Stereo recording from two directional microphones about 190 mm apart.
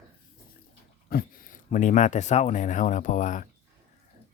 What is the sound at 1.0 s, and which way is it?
Speech, 50° left (ahead or behind).